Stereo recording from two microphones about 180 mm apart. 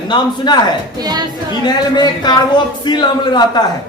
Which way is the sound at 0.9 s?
20° right (ahead or behind).